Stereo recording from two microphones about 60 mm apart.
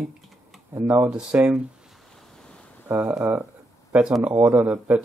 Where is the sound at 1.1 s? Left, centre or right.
Centre.